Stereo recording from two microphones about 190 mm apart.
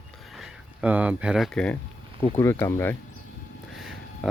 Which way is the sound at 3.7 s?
Centre (ahead or behind).